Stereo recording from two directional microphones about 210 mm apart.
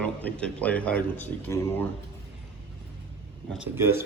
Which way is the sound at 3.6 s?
10° right (ahead or behind).